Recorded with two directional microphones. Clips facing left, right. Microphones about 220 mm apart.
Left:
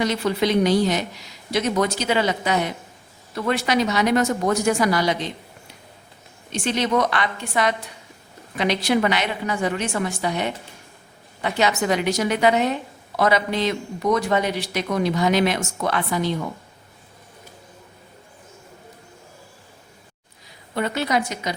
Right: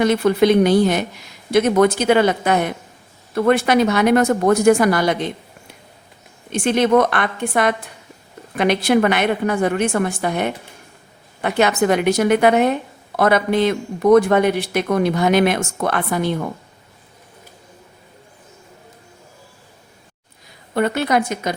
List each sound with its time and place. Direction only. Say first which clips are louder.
0.0 s a woman's voice: right 7 dB; 55° right (ahead or behind)
6.5 s a woman's voice: right 7 dB; 55° right (ahead or behind)
20.7 s a woman's voice: right 5 dB; 55° right (ahead or behind)